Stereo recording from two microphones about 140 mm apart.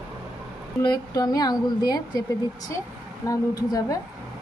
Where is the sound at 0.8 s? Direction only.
30° left (ahead or behind).